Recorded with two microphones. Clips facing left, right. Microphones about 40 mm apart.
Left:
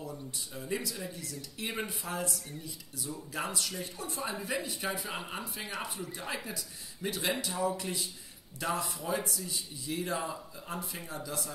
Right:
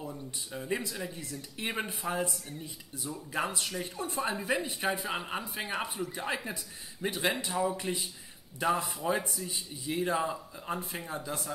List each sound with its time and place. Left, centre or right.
0.5 s speech: right
5.0 s speech: centre